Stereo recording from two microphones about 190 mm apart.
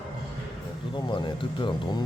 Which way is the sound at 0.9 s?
25° left (ahead or behind).